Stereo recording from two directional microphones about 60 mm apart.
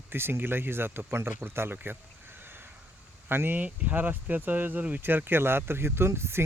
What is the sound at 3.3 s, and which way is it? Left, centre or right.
Speech, right.